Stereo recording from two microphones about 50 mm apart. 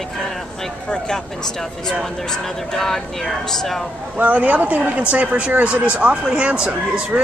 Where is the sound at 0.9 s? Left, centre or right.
Centre.